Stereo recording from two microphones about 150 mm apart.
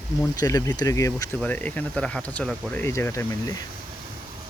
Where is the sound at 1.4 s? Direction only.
10° left (ahead or behind).